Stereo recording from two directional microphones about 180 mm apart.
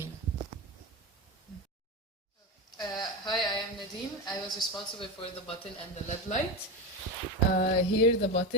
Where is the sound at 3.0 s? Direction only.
25° left (ahead or behind).